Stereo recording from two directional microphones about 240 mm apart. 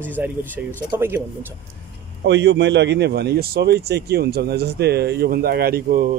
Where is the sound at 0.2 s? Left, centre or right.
Centre.